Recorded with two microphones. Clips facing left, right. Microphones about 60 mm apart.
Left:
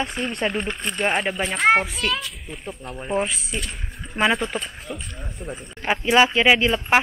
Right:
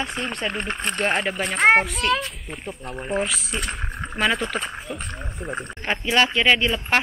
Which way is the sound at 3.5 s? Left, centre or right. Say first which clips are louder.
Right 3 dB; right.